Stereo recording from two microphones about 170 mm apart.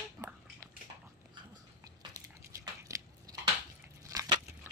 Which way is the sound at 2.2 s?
20° right (ahead or behind).